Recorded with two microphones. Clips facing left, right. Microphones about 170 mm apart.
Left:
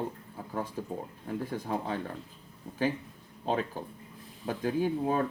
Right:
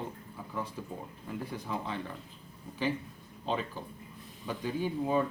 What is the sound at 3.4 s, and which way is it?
Speech, 45° left (ahead or behind).